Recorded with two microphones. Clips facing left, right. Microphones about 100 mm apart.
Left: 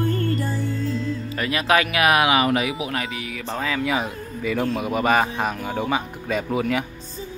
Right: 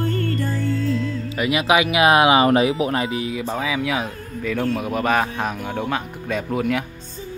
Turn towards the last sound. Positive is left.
turn(degrees=0)  # may be behind; listen again after turning